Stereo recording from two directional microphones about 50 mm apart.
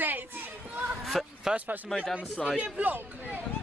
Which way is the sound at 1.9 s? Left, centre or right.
Centre.